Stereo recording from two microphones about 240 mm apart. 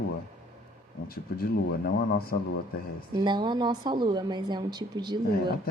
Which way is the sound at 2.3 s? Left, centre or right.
Left.